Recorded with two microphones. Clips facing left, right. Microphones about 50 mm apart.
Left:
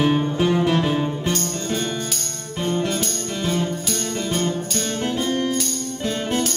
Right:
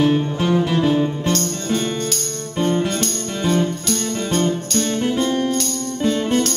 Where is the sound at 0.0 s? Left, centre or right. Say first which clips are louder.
Right 1 dB; centre.